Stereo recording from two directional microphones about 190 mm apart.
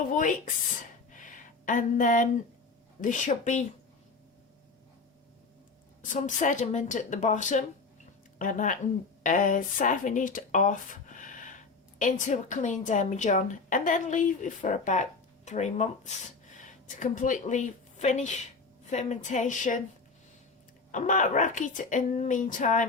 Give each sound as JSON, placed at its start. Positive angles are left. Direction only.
{"t": 0.1, "sound": "speech", "side_deg": 45}
{"t": 1.1, "sound": "a sound", "side_deg": 45}
{"t": 3.0, "sound": "speech", "side_deg": 40}
{"t": 6.0, "sound": "a woman's voice", "side_deg": 40}
{"t": 20.9, "sound": "speech", "side_deg": 40}